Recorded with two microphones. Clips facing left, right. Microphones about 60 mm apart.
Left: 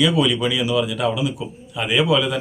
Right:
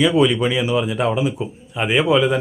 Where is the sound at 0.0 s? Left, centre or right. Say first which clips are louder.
Right 3 dB; right.